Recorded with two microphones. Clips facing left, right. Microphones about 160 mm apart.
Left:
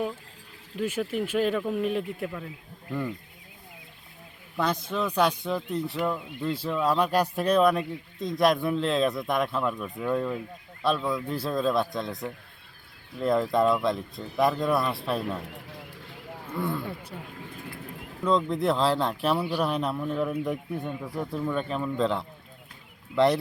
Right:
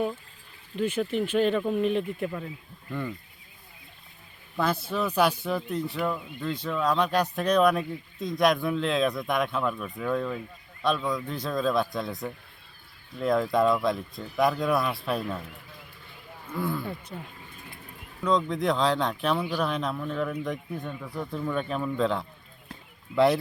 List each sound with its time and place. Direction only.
0.8 s speech: 5° left (ahead or behind)
4.6 s speech: 5° right (ahead or behind)
15.4 s a sound: 75° left (ahead or behind)
16.5 s speech: centre (ahead or behind)
17.3 s bird flight: 65° left (ahead or behind)
18.2 s speech: 5° left (ahead or behind)